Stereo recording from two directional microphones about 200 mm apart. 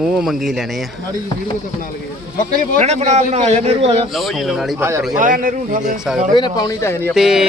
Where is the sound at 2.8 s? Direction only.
35° right (ahead or behind).